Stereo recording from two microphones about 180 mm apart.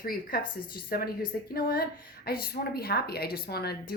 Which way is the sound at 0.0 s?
55° left (ahead or behind).